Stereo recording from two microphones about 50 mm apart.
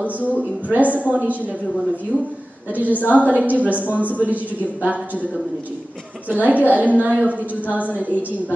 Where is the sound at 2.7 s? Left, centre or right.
Right.